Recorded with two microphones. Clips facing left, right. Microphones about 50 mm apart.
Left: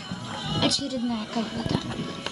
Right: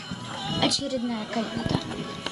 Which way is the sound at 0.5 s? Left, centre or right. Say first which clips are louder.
Even; right.